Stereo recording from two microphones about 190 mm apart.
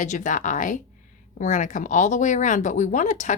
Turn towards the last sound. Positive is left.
turn(degrees=40)  # may be behind; listen again after turning